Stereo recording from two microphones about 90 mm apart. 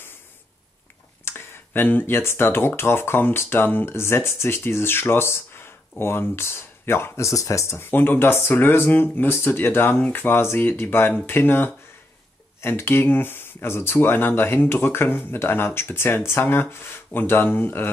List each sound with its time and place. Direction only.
1.2 s speech: 25° left (ahead or behind)
7.7 s speech: 25° left (ahead or behind)